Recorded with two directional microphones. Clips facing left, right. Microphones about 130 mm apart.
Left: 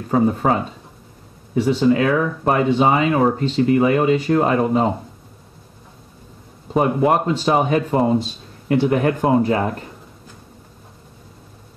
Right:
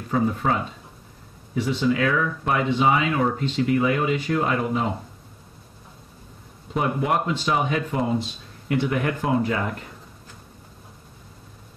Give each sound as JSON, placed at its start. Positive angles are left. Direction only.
{"t": 0.1, "sound": "speech", "side_deg": 40}
{"t": 1.8, "sound": "speech", "side_deg": 35}
{"t": 6.7, "sound": "speech", "side_deg": 35}